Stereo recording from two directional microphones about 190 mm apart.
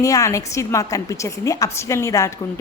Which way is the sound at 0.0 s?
15° left (ahead or behind).